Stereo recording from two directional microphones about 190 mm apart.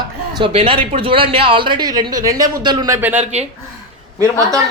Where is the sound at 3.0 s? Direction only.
10° right (ahead or behind).